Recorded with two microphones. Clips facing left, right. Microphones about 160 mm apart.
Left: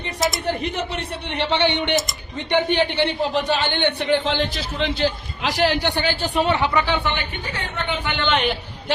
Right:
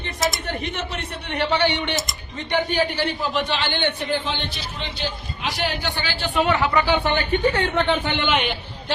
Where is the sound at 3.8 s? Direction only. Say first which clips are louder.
Left 4 dB; 80° left.